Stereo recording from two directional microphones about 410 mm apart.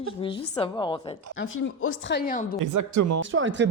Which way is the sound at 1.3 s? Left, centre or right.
Left.